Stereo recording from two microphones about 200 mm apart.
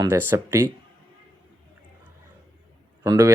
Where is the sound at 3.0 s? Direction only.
15° right (ahead or behind).